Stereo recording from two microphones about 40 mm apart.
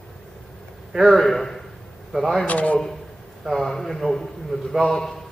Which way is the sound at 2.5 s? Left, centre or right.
Left.